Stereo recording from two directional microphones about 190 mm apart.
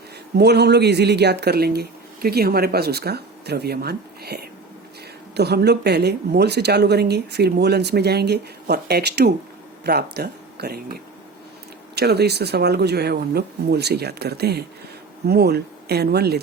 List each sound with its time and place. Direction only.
0.3 s speech: 60° right (ahead or behind)